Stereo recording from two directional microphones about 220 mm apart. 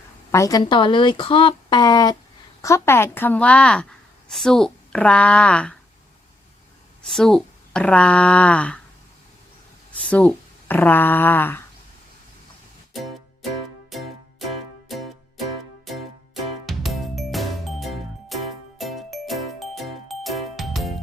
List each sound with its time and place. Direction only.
0.3 s speech: 15° left (ahead or behind)
7.0 s speech: centre (ahead or behind)
10.1 s speech: 5° left (ahead or behind)
12.9 s music: centre (ahead or behind)